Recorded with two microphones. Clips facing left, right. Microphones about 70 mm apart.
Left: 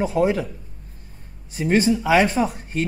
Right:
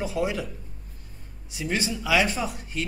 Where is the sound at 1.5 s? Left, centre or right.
Left.